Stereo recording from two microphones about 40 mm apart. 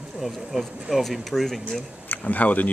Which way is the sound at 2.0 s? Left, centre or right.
Left.